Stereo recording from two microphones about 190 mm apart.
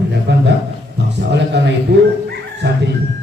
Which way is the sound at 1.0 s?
65° right (ahead or behind).